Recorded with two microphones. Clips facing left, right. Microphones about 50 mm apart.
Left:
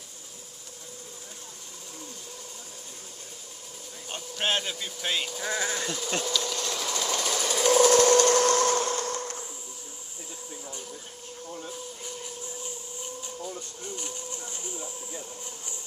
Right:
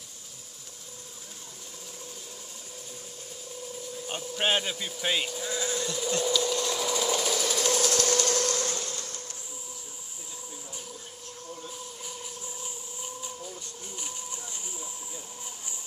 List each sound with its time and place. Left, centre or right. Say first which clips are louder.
4.1 s speech: right 1 dB; centre
5.4 s speech: left 2 dB; left
5.7 s bee: even; left
6.2 s sewing machine: right 3 dB; centre
7.9 s sewing machine: left 8 dB; left
8.2 s a sound: left 7 dB; left
12.0 s a sound: left 2 dB; centre